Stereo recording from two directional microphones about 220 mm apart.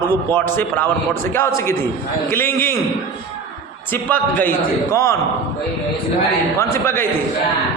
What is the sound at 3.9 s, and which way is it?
A man's voice, 5° left (ahead or behind).